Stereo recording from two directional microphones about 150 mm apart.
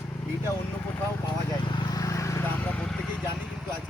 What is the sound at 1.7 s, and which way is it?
Vehicle, 30° left (ahead or behind).